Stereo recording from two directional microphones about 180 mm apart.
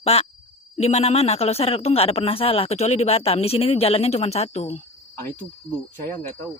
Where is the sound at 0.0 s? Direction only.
35° left (ahead or behind).